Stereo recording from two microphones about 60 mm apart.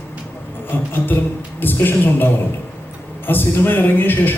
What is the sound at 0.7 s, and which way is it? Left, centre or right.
Speech, left.